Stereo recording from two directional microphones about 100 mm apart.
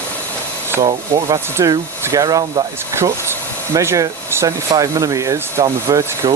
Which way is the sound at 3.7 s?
30° right (ahead or behind).